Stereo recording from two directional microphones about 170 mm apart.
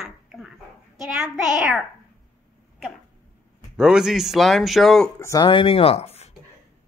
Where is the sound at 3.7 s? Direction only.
5° right (ahead or behind).